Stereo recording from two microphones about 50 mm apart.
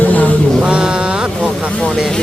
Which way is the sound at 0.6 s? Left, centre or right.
Right.